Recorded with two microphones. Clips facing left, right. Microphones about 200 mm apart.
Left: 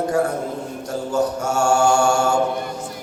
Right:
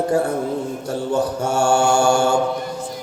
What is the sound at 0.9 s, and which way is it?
Mantra, 30° right (ahead or behind).